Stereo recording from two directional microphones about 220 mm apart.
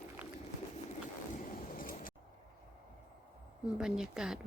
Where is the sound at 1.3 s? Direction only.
40° left (ahead or behind).